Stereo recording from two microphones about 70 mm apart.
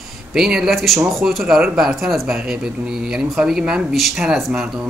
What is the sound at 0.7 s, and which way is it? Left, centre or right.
Speech, centre.